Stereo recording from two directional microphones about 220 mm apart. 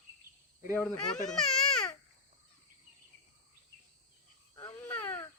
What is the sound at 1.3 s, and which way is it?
Baby cry, centre (ahead or behind).